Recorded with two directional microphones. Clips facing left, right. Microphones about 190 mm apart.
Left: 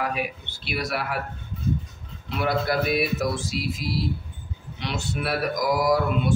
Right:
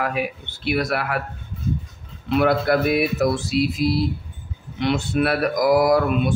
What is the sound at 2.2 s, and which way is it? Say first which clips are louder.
Mantra: right 6 dB; 60° right (ahead or behind).